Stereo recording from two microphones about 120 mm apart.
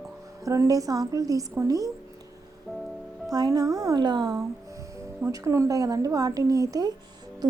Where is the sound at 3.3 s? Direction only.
30° right (ahead or behind).